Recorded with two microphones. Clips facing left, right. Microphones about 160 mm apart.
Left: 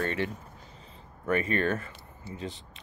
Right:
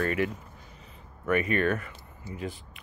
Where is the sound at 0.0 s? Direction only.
30° left (ahead or behind).